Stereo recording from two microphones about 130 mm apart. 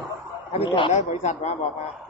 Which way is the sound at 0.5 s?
45° left (ahead or behind).